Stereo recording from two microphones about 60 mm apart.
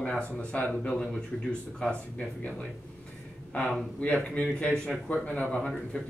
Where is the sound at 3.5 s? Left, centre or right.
Left.